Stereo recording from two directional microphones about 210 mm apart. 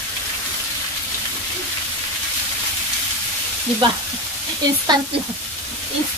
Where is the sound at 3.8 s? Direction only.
25° right (ahead or behind).